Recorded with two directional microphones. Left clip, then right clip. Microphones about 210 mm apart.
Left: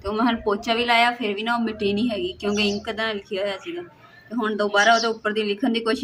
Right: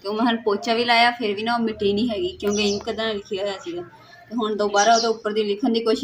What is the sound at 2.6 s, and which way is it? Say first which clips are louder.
Speech: right 1 dB; 10° left (ahead or behind).